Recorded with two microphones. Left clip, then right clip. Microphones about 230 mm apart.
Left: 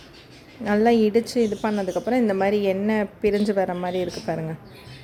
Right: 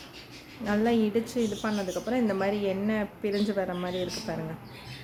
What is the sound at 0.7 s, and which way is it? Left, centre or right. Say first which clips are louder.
A woman's voice: left 8 dB; left.